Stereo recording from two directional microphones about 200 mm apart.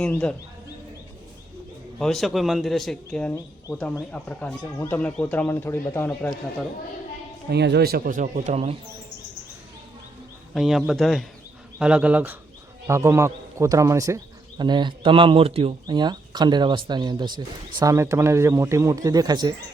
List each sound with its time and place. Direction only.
0.0 s speech: 5° left (ahead or behind)
2.0 s speech: centre (ahead or behind)
7.5 s speech: 55° right (ahead or behind); by 8.7 s 35° right (ahead or behind)
10.5 s speech: centre (ahead or behind); by 19.5 s 20° right (ahead or behind)